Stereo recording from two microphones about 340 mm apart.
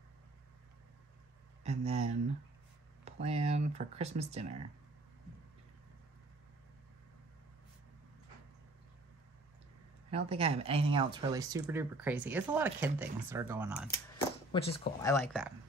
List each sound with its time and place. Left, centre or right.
1.6 s speech: centre
10.1 s speech: centre
14.5 s speech: centre